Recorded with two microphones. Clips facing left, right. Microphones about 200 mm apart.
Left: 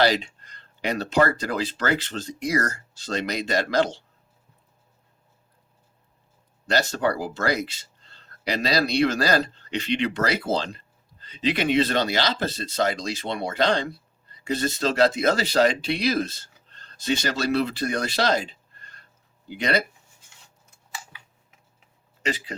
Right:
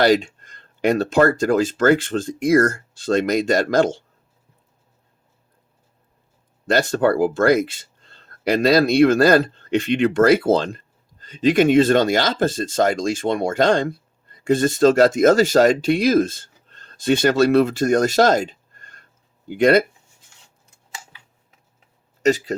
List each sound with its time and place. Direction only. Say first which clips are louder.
0.0 s speech: right 6 dB; 50° right (ahead or behind)
6.7 s speech: right 6 dB; 50° right (ahead or behind)
22.2 s speech: right 11 dB; 45° right (ahead or behind)